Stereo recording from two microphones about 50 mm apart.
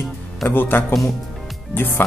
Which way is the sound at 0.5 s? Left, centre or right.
Left.